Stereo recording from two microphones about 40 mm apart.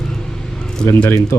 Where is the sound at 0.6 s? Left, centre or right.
Centre.